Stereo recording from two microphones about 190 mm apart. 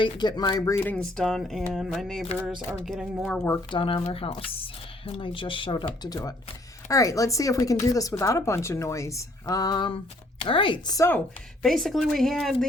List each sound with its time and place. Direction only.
0.0 s speech: 20° left (ahead or behind); by 3.4 s centre (ahead or behind)
3.7 s speech: 30° left (ahead or behind)
11.6 s speech: centre (ahead or behind)